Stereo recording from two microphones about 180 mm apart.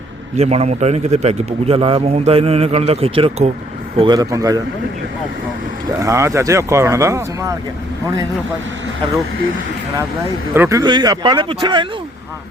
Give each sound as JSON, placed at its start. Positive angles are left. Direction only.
{"t": 0.3, "sound": "a man's voice", "side_deg": -35}
{"t": 6.0, "sound": "speech", "side_deg": -15}
{"t": 10.5, "sound": "speech", "side_deg": -15}